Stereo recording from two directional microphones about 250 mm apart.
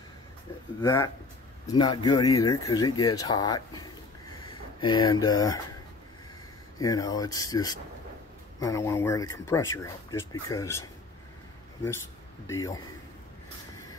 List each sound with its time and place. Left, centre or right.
0.8 s speech: centre
6.8 s speech: centre
12.4 s speech: centre